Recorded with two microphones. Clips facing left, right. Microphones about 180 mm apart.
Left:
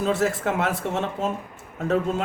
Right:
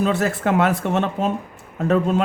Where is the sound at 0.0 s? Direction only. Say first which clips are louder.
Right 3 dB; 65° right (ahead or behind).